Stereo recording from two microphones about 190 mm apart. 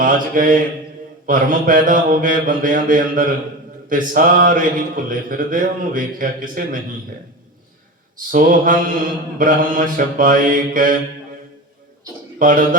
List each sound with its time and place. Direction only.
0.0 s mantra: 45° right (ahead or behind)
8.3 s mantra: 45° right (ahead or behind)
12.4 s a man's voice: 45° right (ahead or behind)